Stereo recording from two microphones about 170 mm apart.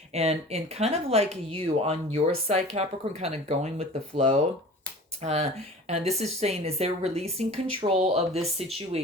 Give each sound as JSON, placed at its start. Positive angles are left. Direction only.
{"t": 0.1, "sound": "a woman's voice", "side_deg": -40}